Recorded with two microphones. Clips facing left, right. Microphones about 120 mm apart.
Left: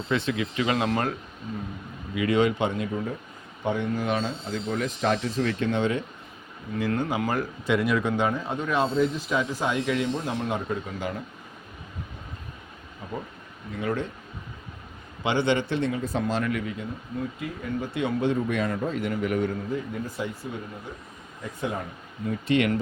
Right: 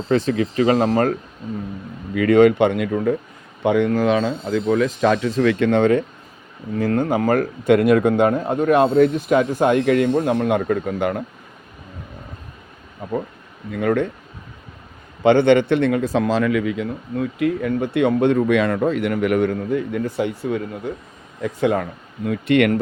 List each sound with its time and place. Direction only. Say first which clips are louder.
0.1 s speech: right 8 dB; 40° right (ahead or behind)
2.1 s a man's voice: right 10 dB; 55° right (ahead or behind); by 3.2 s 75° right (ahead or behind)
3.6 s speech: right 10 dB; 85° right
5.4 s a man's voice: right 9 dB; 70° right (ahead or behind); by 6.1 s 55° right (ahead or behind)
6.7 s a man's voice: right 7 dB; 45° right (ahead or behind)
13.7 s a man's voice: right 9 dB; 60° right (ahead or behind)
15.2 s speech: right 11 dB; 55° right (ahead or behind); by 21.8 s 80° right
22.3 s a man's voice: right 7 dB; 65° right (ahead or behind)